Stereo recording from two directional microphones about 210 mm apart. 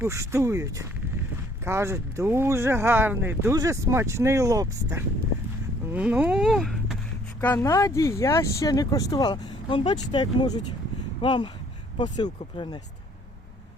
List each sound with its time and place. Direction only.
0.0 s speech: 15° right (ahead or behind)
7.4 s speech: 10° left (ahead or behind)